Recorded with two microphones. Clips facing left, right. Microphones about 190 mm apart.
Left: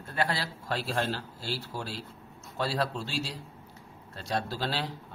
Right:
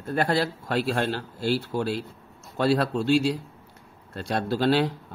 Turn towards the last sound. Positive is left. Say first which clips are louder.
# right 10 dB
turn(degrees=-55)  # may be behind; listen again after turning